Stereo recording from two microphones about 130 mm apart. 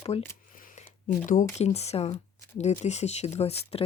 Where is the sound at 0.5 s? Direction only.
90° left.